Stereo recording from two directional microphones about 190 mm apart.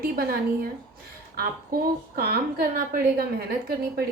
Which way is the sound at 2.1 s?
50° right (ahead or behind).